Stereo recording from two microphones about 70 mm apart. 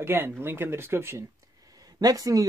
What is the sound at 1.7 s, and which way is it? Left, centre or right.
Speech, right.